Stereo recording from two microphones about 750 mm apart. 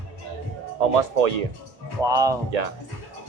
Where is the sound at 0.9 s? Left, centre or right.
Right.